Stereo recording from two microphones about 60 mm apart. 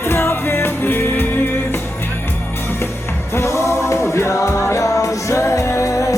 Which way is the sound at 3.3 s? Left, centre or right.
Left.